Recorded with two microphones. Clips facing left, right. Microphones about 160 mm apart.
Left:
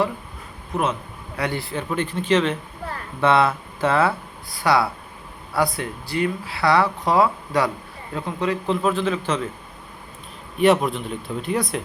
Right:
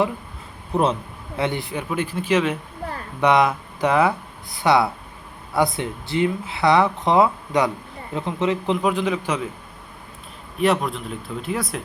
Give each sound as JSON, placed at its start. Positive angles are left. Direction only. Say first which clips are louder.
{"t": 0.7, "sound": "speech", "louder": "right 3 dB", "side_deg": -30}
{"t": 1.4, "sound": "a man's voice", "louder": "right 1 dB", "side_deg": -20}
{"t": 10.6, "sound": "speech", "louder": "left 3 dB", "side_deg": 0}